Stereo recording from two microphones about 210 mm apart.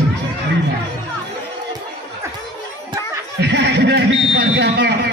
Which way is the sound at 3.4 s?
55° right (ahead or behind).